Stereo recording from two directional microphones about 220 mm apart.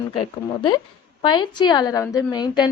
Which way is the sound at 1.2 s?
20° left (ahead or behind).